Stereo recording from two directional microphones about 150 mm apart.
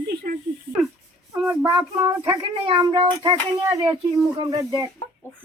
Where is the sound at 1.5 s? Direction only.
20° right (ahead or behind).